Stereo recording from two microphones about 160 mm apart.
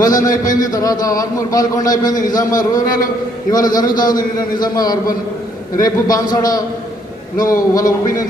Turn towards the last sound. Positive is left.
turn(degrees=20)  # may be behind; listen again after turning